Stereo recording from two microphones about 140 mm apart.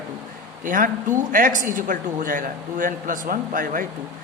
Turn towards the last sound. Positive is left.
turn(degrees=-85)